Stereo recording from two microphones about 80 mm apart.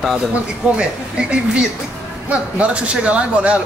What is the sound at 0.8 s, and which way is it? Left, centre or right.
A man's voice, centre.